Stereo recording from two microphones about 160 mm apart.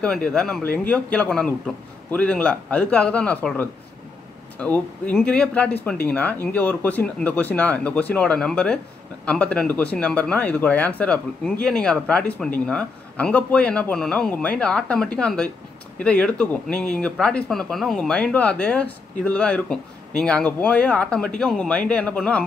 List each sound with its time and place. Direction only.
0.0 s speech: 5° left (ahead or behind)